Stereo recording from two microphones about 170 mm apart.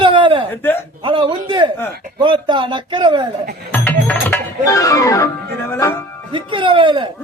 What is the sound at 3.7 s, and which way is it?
Music, 10° left (ahead or behind).